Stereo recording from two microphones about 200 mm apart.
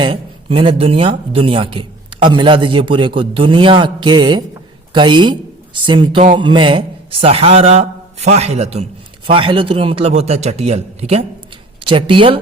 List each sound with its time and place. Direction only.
0.0 s speech: 25° right (ahead or behind)